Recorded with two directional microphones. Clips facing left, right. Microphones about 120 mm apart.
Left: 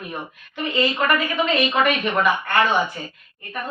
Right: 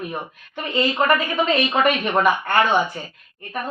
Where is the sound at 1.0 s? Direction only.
35° right (ahead or behind).